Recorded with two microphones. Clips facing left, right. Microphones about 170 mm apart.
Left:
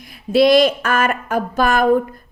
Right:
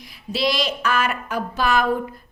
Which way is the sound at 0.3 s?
50° left (ahead or behind).